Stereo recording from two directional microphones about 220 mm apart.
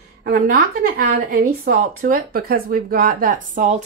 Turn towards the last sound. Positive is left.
turn(degrees=-35)  # may be behind; listen again after turning